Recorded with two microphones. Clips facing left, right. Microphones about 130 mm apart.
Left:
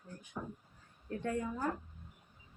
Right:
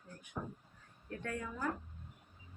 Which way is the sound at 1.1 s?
25° left (ahead or behind).